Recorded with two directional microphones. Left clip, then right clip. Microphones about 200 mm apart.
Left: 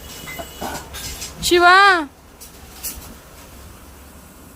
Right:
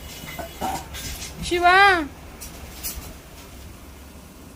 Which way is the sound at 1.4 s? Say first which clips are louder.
Left 4 dB; 40° left (ahead or behind).